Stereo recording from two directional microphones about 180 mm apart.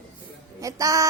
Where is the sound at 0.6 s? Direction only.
20° right (ahead or behind).